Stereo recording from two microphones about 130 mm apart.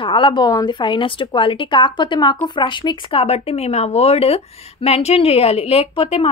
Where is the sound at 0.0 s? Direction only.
40° left (ahead or behind).